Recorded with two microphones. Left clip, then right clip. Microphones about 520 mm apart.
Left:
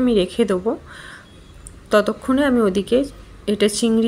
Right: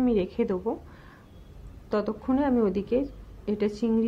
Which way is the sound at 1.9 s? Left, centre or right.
Right.